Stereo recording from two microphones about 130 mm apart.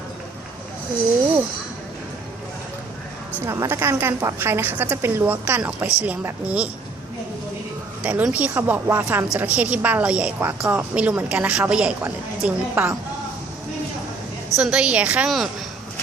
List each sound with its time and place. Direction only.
3.4 s a woman's voice: 20° right (ahead or behind)
8.0 s a woman's voice: 10° right (ahead or behind)
14.5 s a woman's voice: 5° right (ahead or behind)